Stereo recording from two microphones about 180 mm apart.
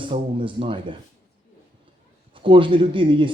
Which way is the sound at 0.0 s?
30° right (ahead or behind).